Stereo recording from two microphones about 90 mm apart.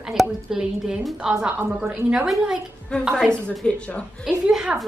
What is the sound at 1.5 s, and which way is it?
Speech, 25° right (ahead or behind).